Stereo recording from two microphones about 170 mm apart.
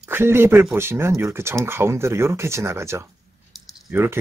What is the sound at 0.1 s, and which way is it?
Speech, 15° right (ahead or behind).